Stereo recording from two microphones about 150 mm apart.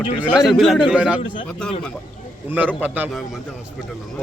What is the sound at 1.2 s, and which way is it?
Speech, 35° left (ahead or behind).